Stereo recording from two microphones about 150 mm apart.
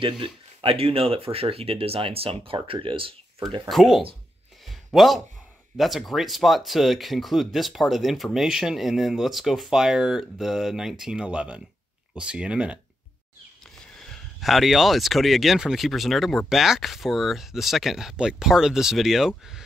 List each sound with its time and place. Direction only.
0.0 s speech: 35° right (ahead or behind)
3.7 s speech: centre (ahead or behind)
4.6 s a sound: centre (ahead or behind)
5.8 s speech: centre (ahead or behind)
13.9 s speech: 5° left (ahead or behind)